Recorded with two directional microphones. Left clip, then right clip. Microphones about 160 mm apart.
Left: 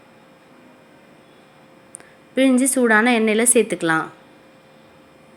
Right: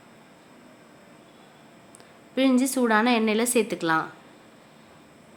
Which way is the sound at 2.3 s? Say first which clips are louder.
Left 5 dB; 15° left (ahead or behind).